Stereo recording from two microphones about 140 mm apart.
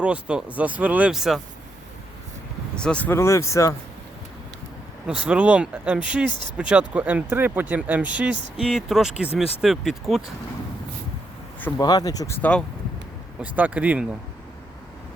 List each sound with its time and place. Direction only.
0.0 s speech: 5° right (ahead or behind)
2.7 s speech: 5° left (ahead or behind)
5.0 s speech: 5° right (ahead or behind)
11.8 s speech: 30° left (ahead or behind)
12.4 s speech: 10° left (ahead or behind)
13.4 s speech: 10° right (ahead or behind)